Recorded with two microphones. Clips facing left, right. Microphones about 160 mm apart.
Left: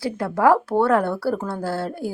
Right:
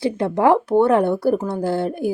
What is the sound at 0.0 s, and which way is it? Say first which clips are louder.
Speech: right 2 dB; 20° right (ahead or behind).